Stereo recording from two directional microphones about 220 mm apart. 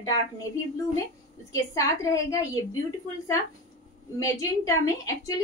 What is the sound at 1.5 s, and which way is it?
A woman's voice, 15° left (ahead or behind).